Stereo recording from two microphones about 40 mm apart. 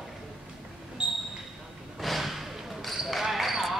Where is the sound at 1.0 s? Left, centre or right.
Right.